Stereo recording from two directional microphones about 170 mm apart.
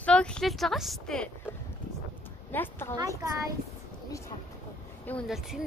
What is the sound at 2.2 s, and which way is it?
Music, 10° left (ahead or behind).